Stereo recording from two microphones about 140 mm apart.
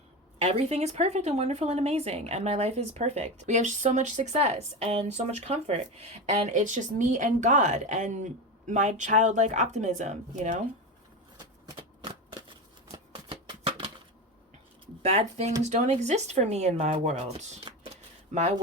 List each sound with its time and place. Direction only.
0.3 s speech: 50° right (ahead or behind)
12.9 s shuffling cards: 40° right (ahead or behind)
15.1 s speech: 50° right (ahead or behind)